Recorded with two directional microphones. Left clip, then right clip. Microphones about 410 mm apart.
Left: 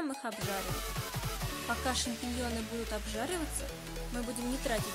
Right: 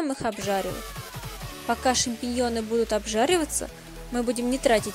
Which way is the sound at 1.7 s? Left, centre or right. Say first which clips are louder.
Right 11 dB; centre.